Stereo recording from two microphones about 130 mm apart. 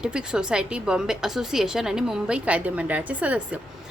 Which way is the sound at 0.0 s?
5° right (ahead or behind).